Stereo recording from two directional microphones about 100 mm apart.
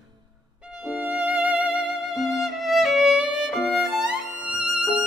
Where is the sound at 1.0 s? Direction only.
15° right (ahead or behind).